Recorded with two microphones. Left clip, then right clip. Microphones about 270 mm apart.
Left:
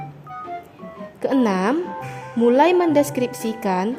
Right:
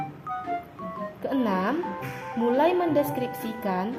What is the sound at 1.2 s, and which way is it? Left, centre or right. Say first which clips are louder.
Speech: left 7 dB; left.